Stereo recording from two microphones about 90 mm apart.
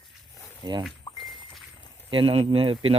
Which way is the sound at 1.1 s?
70° left (ahead or behind).